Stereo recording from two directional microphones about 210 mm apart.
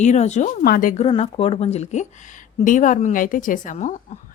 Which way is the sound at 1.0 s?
25° left (ahead or behind).